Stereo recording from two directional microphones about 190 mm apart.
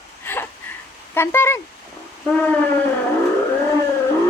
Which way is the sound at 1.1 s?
10° left (ahead or behind).